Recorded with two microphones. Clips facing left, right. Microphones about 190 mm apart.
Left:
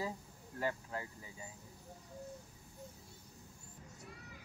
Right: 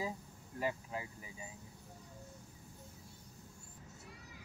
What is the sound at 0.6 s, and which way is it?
Speech, 15° right (ahead or behind).